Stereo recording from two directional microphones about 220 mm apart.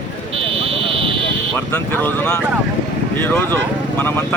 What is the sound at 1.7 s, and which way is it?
Speech, 10° left (ahead or behind).